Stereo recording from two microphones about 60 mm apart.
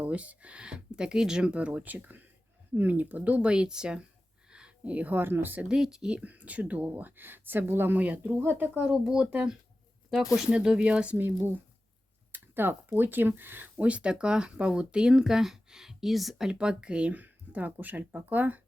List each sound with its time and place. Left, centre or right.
0.0 s speech: right
3.5 s speech: centre
4.5 s a sound: centre
5.1 s speech: right
5.6 s speech: centre
11.2 s speech: right; by 16.5 s centre
16.5 s speech: centre